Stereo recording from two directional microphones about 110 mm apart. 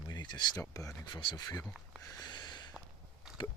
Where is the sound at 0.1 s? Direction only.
40° left (ahead or behind).